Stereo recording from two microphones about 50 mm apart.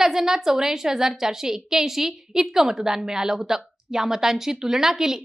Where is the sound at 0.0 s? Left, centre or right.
Centre.